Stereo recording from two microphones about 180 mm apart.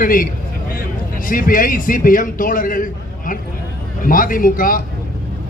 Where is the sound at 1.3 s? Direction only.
50° left (ahead or behind).